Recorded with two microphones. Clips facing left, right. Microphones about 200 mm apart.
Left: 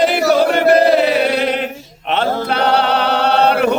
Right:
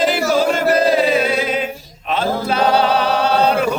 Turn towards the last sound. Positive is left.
turn(degrees=65)  # may be behind; listen again after turning